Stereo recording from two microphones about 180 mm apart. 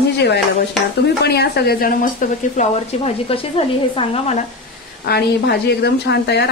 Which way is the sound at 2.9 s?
35° left (ahead or behind).